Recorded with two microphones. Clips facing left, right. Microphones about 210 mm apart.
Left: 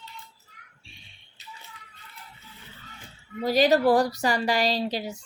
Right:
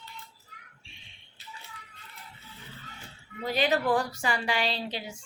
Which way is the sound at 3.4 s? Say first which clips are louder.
Left 7 dB; 40° left (ahead or behind).